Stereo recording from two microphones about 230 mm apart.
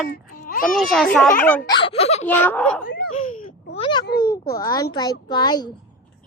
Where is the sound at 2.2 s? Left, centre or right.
Centre.